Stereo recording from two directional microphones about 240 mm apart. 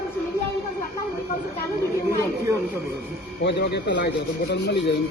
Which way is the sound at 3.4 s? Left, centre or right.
Left.